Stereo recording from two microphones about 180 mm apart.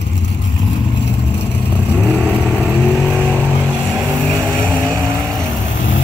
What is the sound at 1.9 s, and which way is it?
Vehicle, 10° left (ahead or behind).